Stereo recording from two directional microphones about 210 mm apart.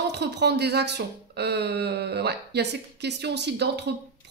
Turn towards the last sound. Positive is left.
turn(degrees=-55)  # may be behind; listen again after turning